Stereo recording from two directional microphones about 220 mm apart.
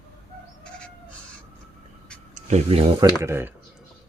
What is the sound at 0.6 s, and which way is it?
Bird, 5° left (ahead or behind).